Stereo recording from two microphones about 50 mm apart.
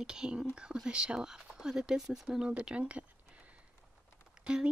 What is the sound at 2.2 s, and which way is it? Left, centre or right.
Speech, centre.